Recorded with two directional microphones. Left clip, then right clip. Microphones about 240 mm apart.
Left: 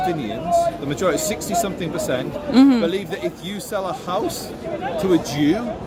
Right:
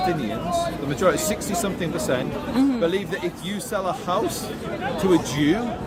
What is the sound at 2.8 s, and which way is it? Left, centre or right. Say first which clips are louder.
A man's voice: left 1 dB; centre.